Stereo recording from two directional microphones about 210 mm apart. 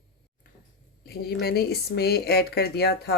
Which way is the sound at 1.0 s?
50° left (ahead or behind).